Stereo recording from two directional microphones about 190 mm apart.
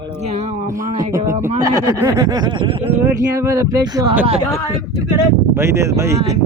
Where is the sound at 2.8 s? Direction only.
10° right (ahead or behind).